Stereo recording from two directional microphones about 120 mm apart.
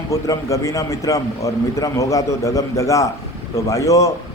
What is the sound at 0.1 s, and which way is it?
A man's voice, 25° left (ahead or behind).